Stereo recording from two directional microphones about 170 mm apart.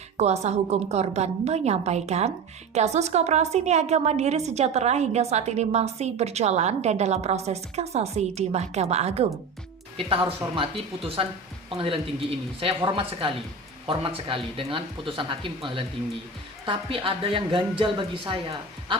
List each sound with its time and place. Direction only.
0.2 s a woman's voice: 40° right (ahead or behind)